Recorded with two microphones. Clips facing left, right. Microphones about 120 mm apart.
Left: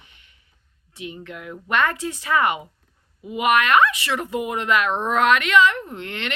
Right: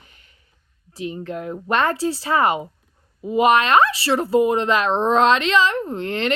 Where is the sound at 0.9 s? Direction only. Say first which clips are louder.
Right 7 dB; 35° right (ahead or behind).